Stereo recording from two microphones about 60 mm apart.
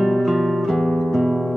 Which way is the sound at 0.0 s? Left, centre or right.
Centre.